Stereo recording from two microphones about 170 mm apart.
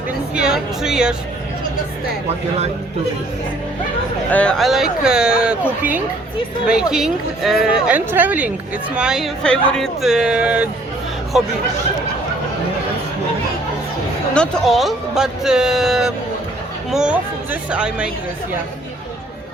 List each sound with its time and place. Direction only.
0.3 s speech: 5° right (ahead or behind)
4.3 s speech: 5° left (ahead or behind)
6.9 s speech: centre (ahead or behind)
14.3 s speech: 5° left (ahead or behind)